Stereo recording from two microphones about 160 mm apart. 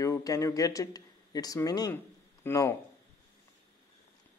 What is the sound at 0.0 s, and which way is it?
Speech, 20° left (ahead or behind).